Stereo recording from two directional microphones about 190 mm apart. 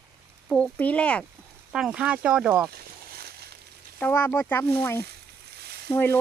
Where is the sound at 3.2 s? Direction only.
55° right (ahead or behind).